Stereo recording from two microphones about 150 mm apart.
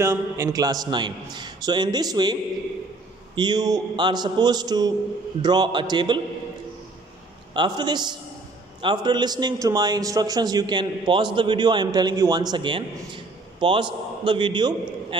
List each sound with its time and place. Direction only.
0.0 s a man's voice: 20° right (ahead or behind)
3.3 s a man's voice: 25° right (ahead or behind)
7.5 s a man's voice: 30° right (ahead or behind)